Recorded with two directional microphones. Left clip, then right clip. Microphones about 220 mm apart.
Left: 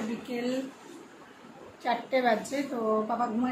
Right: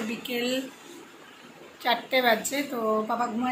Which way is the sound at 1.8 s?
5° left (ahead or behind).